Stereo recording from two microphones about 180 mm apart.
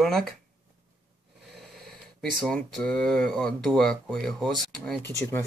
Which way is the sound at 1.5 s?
Centre (ahead or behind).